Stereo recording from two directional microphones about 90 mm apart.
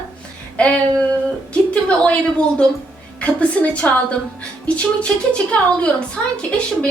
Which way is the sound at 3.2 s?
15° left (ahead or behind).